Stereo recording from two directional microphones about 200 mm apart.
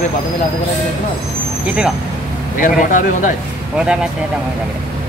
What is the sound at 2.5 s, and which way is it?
Speech, 40° left (ahead or behind).